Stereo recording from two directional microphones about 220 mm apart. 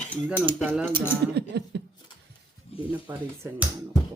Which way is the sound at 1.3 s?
50° right (ahead or behind).